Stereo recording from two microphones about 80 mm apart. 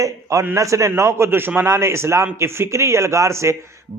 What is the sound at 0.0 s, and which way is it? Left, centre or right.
A man's voice, right.